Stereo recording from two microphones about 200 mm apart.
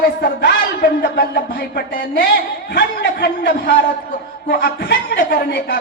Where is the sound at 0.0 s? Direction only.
50° left (ahead or behind).